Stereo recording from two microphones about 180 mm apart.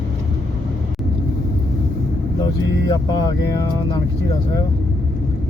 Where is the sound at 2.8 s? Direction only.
20° left (ahead or behind).